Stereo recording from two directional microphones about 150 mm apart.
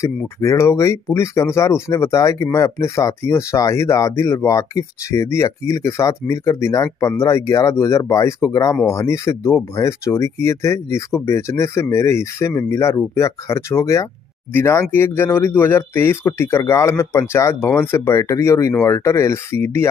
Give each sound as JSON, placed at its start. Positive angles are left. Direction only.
{"t": 0.0, "sound": "speech", "side_deg": 20}